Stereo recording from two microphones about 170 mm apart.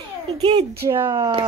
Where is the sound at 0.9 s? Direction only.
20° right (ahead or behind).